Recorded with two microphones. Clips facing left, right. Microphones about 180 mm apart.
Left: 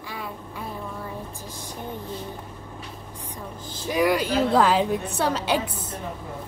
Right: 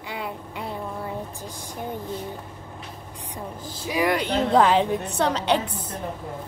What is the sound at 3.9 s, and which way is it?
A woman's voice, centre (ahead or behind).